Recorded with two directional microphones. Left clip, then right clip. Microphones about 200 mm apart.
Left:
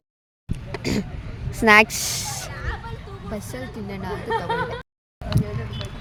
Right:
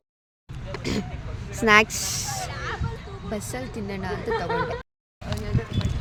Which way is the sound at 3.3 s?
5° right (ahead or behind).